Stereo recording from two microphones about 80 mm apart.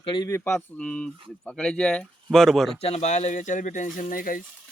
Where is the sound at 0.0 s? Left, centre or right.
Left.